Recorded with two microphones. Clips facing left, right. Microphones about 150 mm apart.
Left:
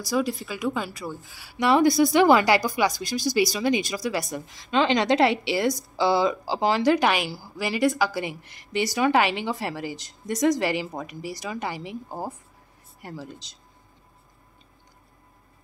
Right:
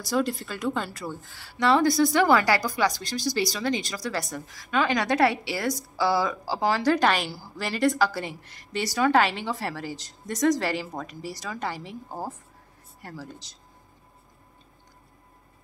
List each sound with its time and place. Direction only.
0.0 s a woman's voice: centre (ahead or behind); by 13.3 s 20° left (ahead or behind)